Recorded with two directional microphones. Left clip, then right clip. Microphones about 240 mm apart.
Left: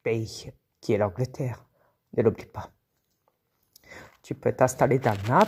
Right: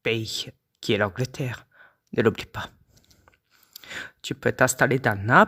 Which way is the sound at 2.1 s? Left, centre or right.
Right.